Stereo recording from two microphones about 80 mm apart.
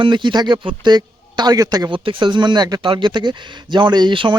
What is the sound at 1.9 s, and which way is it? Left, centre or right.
Speech, right.